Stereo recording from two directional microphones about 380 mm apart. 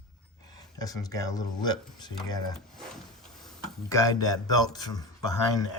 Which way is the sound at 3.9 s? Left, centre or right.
Centre.